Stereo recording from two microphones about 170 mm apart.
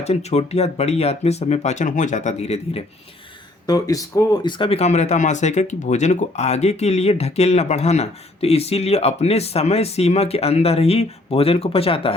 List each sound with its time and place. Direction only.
0.0 s speech: 40° left (ahead or behind)
3.7 s speech: 20° left (ahead or behind)